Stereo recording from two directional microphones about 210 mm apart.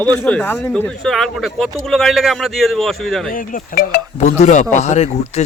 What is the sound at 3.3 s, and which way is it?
Speech, 40° left (ahead or behind).